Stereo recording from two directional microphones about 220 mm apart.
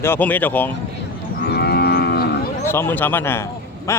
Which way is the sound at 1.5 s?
45° left (ahead or behind).